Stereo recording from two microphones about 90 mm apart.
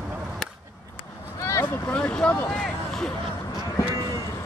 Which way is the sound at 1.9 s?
10° left (ahead or behind).